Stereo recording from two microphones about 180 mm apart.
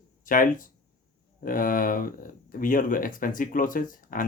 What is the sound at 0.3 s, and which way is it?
Speech, 50° left (ahead or behind).